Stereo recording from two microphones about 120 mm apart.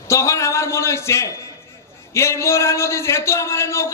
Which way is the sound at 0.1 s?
25° left (ahead or behind).